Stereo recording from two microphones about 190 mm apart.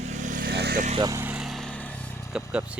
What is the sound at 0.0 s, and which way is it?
Vehicle, 40° right (ahead or behind).